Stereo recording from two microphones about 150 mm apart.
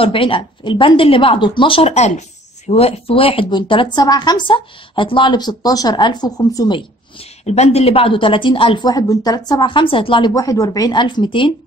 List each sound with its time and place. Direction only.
0.0 s a woman's voice: 35° left (ahead or behind)
7.4 s a woman's voice: 45° left (ahead or behind)